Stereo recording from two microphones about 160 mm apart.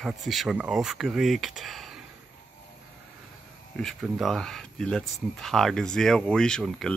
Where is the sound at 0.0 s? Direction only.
Centre (ahead or behind).